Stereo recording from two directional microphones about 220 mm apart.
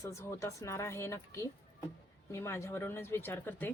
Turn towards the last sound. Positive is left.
turn(degrees=10)  # may be behind; listen again after turning